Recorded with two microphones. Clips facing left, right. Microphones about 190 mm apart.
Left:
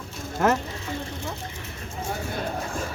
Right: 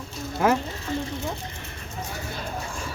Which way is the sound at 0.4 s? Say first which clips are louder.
Even; 5° right (ahead or behind).